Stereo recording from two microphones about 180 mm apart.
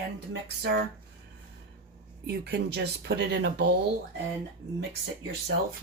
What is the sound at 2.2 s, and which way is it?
Speech, 65° right (ahead or behind).